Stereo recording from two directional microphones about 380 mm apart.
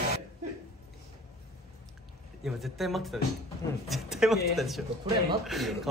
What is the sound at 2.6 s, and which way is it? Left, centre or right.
A man's voice, centre.